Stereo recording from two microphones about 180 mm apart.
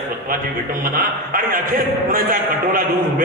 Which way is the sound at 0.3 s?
50° right (ahead or behind).